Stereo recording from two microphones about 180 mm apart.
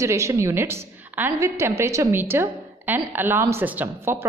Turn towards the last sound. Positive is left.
turn(degrees=-15)  # may be behind; listen again after turning